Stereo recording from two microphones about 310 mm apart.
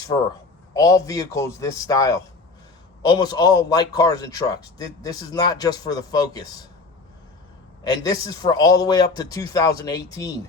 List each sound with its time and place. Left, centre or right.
0.1 s a man's voice: centre
7.9 s speech: centre